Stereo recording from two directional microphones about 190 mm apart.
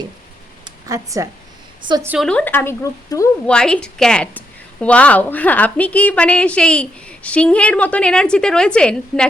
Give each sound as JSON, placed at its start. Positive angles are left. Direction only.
{"t": 0.6, "sound": "speech", "side_deg": -15}
{"t": 2.0, "sound": "a woman's voice", "side_deg": 0}
{"t": 3.4, "sound": "a woman's voice", "side_deg": 5}